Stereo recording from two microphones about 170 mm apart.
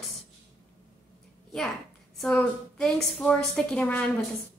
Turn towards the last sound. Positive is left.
turn(degrees=5)  # may be behind; listen again after turning